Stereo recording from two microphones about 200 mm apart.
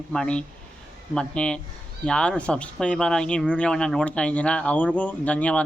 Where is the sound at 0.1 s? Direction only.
5° left (ahead or behind).